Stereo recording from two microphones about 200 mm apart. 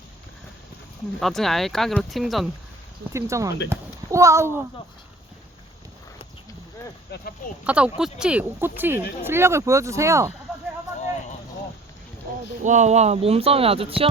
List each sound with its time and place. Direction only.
1.2 s speech: centre (ahead or behind)
3.1 s a child's voice: 15° right (ahead or behind)
7.1 s speech: 50° left (ahead or behind)
7.6 s speech: 5° right (ahead or behind)
12.6 s speech: 35° right (ahead or behind)